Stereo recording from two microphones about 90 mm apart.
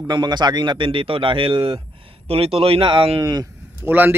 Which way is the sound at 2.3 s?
90° right.